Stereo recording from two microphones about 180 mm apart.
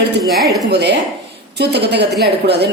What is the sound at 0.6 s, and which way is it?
A woman's voice, 70° right (ahead or behind).